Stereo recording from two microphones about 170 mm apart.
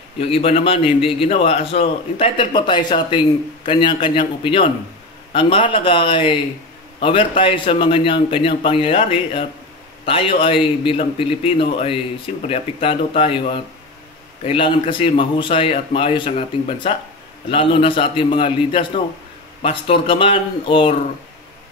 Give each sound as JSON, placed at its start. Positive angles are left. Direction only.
{"t": 0.2, "sound": "a man's voice", "side_deg": 35}
{"t": 14.4, "sound": "a man's voice", "side_deg": 30}